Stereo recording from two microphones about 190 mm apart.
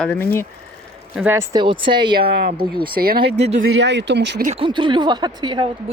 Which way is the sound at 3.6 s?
65° right (ahead or behind).